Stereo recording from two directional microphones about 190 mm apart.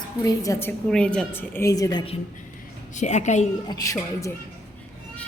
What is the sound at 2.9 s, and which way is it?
Speech, 40° left (ahead or behind).